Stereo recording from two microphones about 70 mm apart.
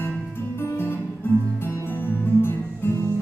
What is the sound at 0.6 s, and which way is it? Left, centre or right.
Music, left.